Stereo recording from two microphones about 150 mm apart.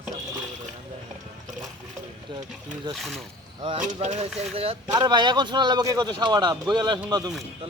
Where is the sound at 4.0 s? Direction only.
50° right (ahead or behind).